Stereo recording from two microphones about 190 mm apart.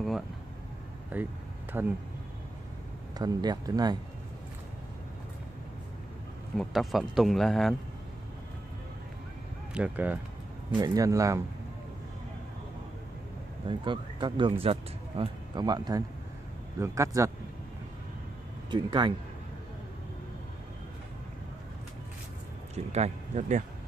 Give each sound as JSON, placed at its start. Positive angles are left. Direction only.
{"t": 1.1, "sound": "speech", "side_deg": -10}
{"t": 3.2, "sound": "speech", "side_deg": -20}
{"t": 6.5, "sound": "speech", "side_deg": 0}
{"t": 9.8, "sound": "speech", "side_deg": -10}
{"t": 10.7, "sound": "speech", "side_deg": -20}
{"t": 13.7, "sound": "speech", "side_deg": -25}
{"t": 18.7, "sound": "speech", "side_deg": -25}
{"t": 22.9, "sound": "speech", "side_deg": -35}